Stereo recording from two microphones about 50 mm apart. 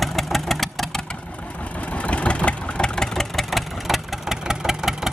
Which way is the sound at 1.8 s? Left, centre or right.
Left.